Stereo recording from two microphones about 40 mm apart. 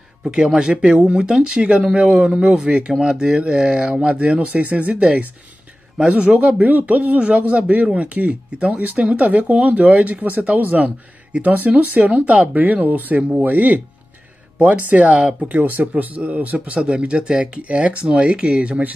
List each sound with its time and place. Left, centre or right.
0.2 s speech: centre; by 7.2 s right
7.2 s speech: right
15.4 s speech: right